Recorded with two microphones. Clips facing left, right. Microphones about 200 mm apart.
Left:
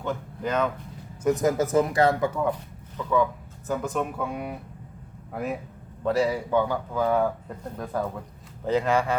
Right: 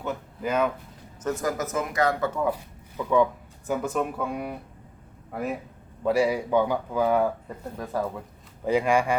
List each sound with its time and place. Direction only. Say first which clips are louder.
0.0 s speech: left 1 dB; 10° right (ahead or behind)
1.2 s a man's voice: left 5 dB; 15° left (ahead or behind)
1.5 s a man's voice: left 5 dB; 30° left (ahead or behind)
3.0 s a man's voice: right 2 dB; 15° right (ahead or behind)
3.7 s a man's voice: right 1 dB; centre (ahead or behind)
7.2 s a man's voice: even; centre (ahead or behind)